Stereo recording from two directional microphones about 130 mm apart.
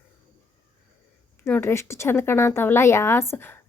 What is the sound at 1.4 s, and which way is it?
Speech, 15° left (ahead or behind).